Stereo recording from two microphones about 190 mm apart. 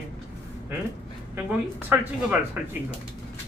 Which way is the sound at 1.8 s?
10° right (ahead or behind).